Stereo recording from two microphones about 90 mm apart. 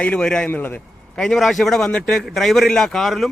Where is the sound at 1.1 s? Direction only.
5° left (ahead or behind).